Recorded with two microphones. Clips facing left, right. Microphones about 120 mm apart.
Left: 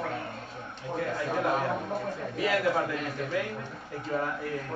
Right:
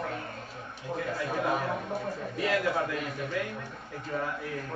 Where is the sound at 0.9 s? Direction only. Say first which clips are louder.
Left 2 dB; centre (ahead or behind).